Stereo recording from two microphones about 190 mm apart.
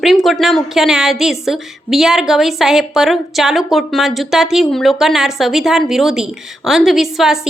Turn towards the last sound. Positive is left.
turn(degrees=0)  # may be behind; listen again after turning